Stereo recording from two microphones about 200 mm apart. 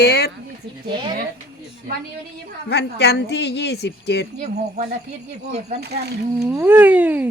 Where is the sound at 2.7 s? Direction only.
55° left (ahead or behind).